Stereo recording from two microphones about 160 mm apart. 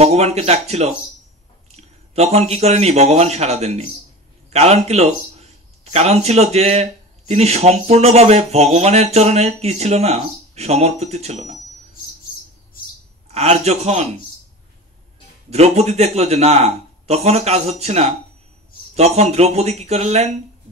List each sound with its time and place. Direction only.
0.0 s a man's voice: 40° right (ahead or behind)
13.3 s a man's voice: 40° right (ahead or behind)
15.5 s a man's voice: 40° right (ahead or behind)